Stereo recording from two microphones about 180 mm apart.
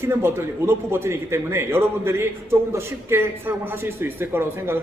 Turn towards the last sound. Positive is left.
turn(degrees=-15)  # may be behind; listen again after turning